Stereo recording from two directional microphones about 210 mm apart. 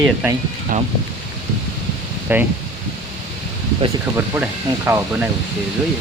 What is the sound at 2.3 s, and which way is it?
Speech, 10° right (ahead or behind).